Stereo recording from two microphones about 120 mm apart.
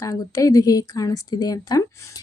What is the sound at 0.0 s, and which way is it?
Speech, 25° left (ahead or behind).